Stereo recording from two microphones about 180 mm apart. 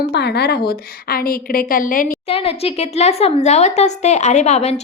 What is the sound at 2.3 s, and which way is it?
Speech, 35° left (ahead or behind).